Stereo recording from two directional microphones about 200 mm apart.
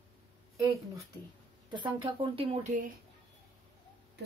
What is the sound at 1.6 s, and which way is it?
Speech, 25° right (ahead or behind).